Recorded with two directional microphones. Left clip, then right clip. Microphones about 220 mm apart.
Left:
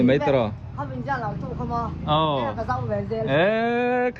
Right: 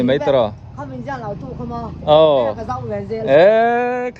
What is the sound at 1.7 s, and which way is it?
Speech, 50° right (ahead or behind).